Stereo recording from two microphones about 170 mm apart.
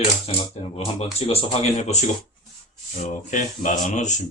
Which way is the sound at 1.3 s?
40° left (ahead or behind).